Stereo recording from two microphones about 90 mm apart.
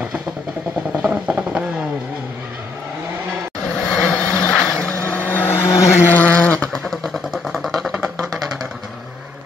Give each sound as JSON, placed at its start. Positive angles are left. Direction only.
{"t": 1.0, "sound": "vehicle", "side_deg": -15}
{"t": 3.8, "sound": "vehicle", "side_deg": 10}
{"t": 5.7, "sound": "vehicle", "side_deg": 35}
{"t": 5.9, "sound": "vehicle", "side_deg": 20}